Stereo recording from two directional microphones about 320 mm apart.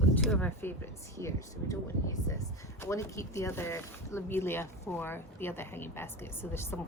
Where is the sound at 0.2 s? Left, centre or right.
Centre.